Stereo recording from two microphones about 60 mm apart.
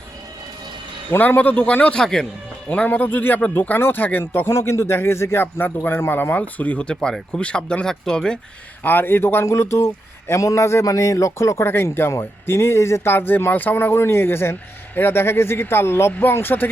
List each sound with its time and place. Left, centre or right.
1.2 s speech: left
2.0 s speech: centre
2.6 s speech: left
8.8 s speech: left
9.5 s speech: left
10.4 s speech: left
10.8 s speech: left
13.1 s speech: left